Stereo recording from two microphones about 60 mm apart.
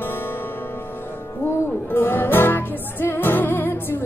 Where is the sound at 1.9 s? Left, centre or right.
Left.